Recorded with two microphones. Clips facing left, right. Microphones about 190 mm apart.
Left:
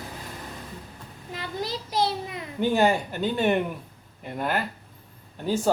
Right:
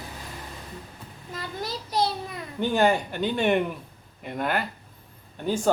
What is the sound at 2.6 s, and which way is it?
Speech, 5° left (ahead or behind).